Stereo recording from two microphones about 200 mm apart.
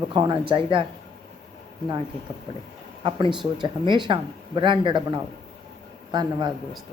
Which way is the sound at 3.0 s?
25° right (ahead or behind).